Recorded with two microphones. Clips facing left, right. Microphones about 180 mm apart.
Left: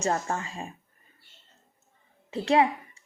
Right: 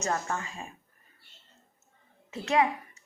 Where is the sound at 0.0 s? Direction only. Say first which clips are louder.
Left 3 dB; 30° left (ahead or behind).